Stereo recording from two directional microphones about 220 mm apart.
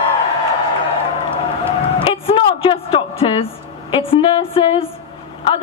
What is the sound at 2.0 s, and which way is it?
A man's voice, 25° left (ahead or behind).